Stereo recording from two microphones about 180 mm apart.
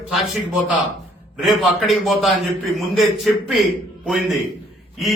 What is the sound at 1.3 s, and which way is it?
A man's voice, centre (ahead or behind).